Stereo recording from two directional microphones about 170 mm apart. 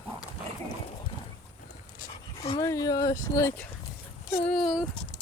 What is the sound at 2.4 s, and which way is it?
Dog, 35° left (ahead or behind).